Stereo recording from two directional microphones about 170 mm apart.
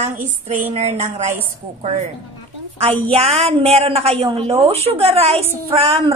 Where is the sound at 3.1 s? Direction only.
35° right (ahead or behind).